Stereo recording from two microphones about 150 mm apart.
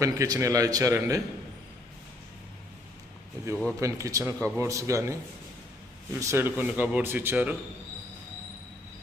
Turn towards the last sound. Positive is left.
turn(degrees=-10)  # may be behind; listen again after turning